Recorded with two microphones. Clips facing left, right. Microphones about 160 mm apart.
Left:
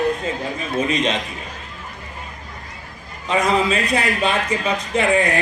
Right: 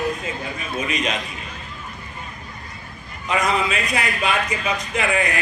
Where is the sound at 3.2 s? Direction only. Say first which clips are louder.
Left 3 dB; 30° left (ahead or behind).